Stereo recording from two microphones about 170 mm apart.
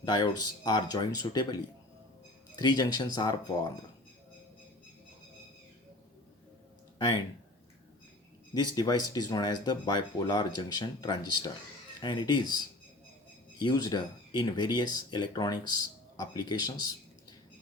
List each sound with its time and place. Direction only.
0.0 s speech: 25° left (ahead or behind)
8.5 s speech: 25° left (ahead or behind)
13.6 s speech: 25° left (ahead or behind)